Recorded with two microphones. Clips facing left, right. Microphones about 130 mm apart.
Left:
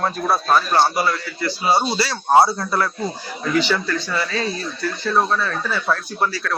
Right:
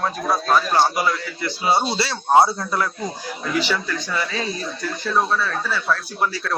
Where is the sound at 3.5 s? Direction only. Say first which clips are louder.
Left 3 dB; 10° right (ahead or behind).